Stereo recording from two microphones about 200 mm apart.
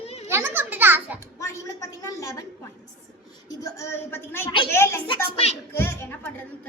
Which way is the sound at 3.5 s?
15° left (ahead or behind).